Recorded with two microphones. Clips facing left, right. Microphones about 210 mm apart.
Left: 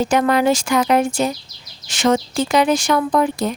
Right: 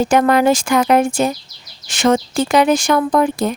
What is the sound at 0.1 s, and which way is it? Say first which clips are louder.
Speech: right 3 dB; 50° right (ahead or behind).